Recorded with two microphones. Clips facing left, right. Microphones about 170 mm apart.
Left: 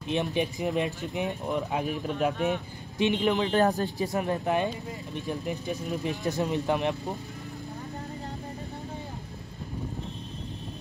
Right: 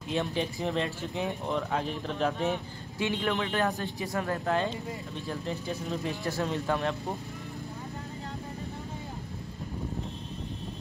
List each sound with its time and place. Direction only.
0.1 s a man's voice: 20° left (ahead or behind)
3.4 s speech: 35° left (ahead or behind)
4.0 s speech: 20° left (ahead or behind)